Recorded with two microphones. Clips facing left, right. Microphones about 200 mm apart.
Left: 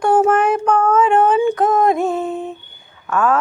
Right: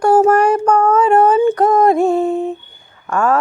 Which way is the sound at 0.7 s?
40° right (ahead or behind).